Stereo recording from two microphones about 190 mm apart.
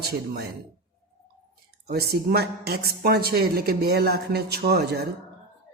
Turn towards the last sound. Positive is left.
turn(degrees=-60)  # may be behind; listen again after turning